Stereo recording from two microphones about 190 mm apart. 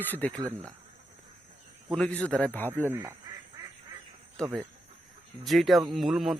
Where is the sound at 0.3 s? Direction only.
15° right (ahead or behind).